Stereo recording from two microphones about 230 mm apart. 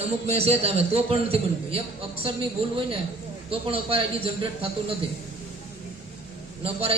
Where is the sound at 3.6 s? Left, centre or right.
Right.